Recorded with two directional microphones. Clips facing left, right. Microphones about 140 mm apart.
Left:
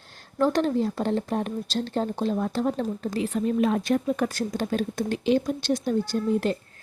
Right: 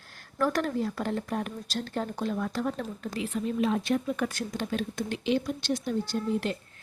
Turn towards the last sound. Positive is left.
turn(degrees=40)  # may be behind; listen again after turning